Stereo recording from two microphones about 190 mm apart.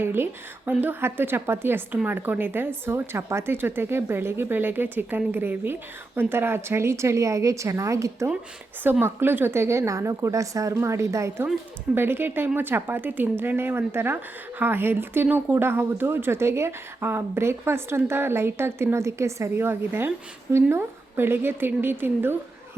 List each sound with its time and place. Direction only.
0.0 s speech: 10° right (ahead or behind)